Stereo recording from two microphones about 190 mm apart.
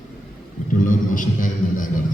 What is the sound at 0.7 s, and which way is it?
A man's voice, 45° left (ahead or behind).